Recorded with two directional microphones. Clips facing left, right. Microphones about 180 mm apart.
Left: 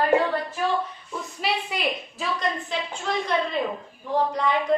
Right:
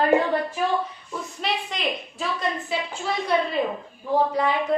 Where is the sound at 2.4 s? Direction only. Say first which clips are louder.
Right 1 dB; 5° right (ahead or behind).